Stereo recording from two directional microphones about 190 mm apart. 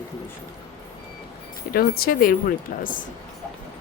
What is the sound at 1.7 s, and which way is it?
Speech, 50° left (ahead or behind).